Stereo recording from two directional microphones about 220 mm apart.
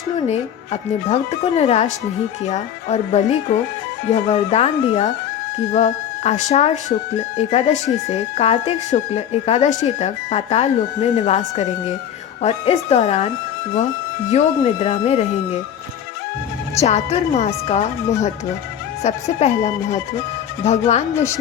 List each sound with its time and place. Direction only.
0.2 s speech: 30° left (ahead or behind)
16.7 s speech: 30° left (ahead or behind)